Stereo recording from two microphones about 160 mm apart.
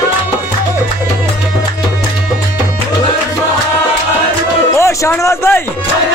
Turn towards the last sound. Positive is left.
turn(degrees=15)  # may be behind; listen again after turning